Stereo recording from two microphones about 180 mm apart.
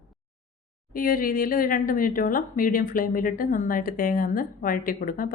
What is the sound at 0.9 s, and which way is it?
Speech, 50° left (ahead or behind).